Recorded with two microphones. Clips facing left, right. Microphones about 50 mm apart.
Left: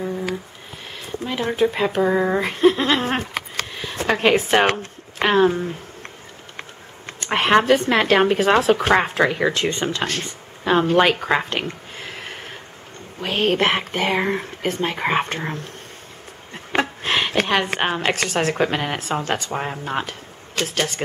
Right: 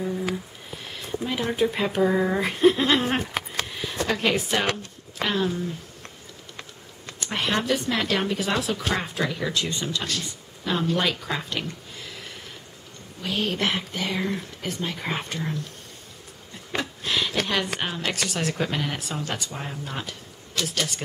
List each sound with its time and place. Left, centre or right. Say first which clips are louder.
1.3 s speech: left 4 dB; centre
2.5 s laughter: left 2 dB; centre
2.8 s speech: left 2 dB; centre
4.1 s speech: left 8 dB; left
7.1 s speech: left 9 dB; left